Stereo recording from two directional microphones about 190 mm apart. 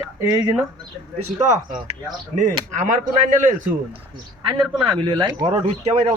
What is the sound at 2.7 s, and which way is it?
Speech, 40° right (ahead or behind).